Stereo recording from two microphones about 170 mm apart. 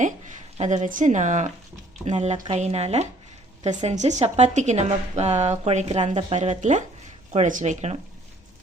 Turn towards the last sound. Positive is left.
turn(degrees=-40)  # may be behind; listen again after turning